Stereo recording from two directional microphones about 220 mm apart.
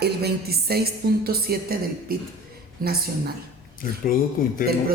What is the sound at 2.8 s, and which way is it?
Speech, 40° right (ahead or behind).